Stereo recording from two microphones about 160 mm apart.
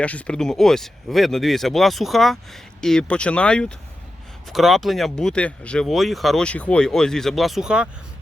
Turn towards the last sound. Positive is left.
turn(degrees=-5)  # may be behind; listen again after turning